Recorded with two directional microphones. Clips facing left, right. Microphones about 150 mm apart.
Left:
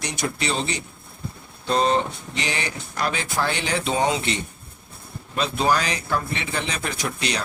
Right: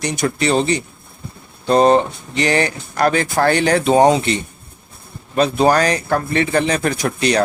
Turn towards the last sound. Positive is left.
turn(degrees=-50)  # may be behind; listen again after turning